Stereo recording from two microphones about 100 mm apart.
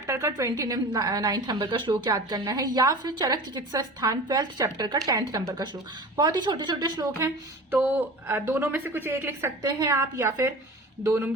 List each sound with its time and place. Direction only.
0.1 s a woman's voice: 30° right (ahead or behind)
7.7 s a woman's voice: 20° right (ahead or behind)